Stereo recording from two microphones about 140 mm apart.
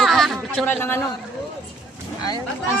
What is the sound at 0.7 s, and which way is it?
Speech, 15° left (ahead or behind).